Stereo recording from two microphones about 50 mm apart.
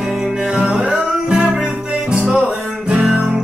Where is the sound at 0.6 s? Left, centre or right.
Centre.